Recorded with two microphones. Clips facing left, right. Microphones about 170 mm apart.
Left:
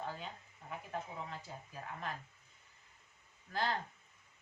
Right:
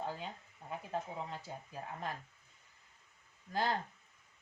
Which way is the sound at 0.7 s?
25° right (ahead or behind).